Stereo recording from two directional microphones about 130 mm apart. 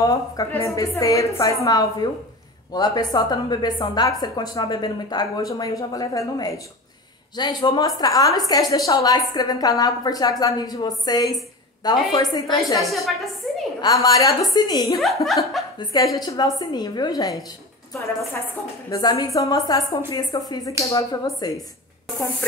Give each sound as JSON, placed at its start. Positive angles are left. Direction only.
{"t": 0.0, "sound": "a woman's voice", "side_deg": 25}
{"t": 13.4, "sound": "a sound", "side_deg": 5}
{"t": 13.7, "sound": "a woman's voice", "side_deg": 30}
{"t": 15.2, "sound": "speech", "side_deg": 0}
{"t": 15.8, "sound": "a woman's voice", "side_deg": 30}
{"t": 18.9, "sound": "a woman's voice", "side_deg": 25}